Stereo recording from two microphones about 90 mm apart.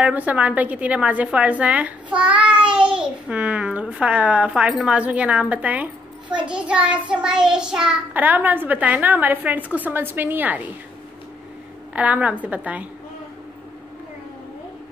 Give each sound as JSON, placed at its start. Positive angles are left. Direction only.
{"t": 0.0, "sound": "a woman's voice", "side_deg": -15}
{"t": 8.1, "sound": "a woman's voice", "side_deg": -20}
{"t": 11.9, "sound": "a woman's voice", "side_deg": -15}